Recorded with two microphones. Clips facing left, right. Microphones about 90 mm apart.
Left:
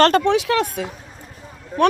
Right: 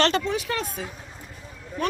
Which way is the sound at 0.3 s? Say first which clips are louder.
Left 10 dB; 75° left (ahead or behind).